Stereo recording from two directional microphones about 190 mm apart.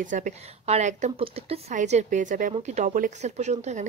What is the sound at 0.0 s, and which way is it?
Speech, 40° right (ahead or behind).